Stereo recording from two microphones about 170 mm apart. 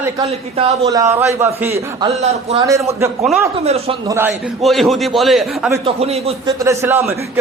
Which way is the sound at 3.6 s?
35° right (ahead or behind).